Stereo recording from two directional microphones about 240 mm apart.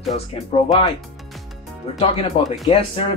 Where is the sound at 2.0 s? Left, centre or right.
Left.